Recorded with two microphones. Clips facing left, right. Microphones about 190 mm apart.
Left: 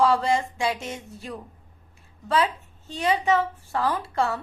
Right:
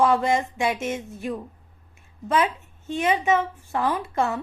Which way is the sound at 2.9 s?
20° right (ahead or behind).